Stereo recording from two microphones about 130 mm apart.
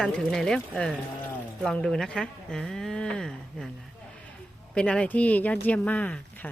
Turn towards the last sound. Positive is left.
turn(degrees=10)  # may be behind; listen again after turning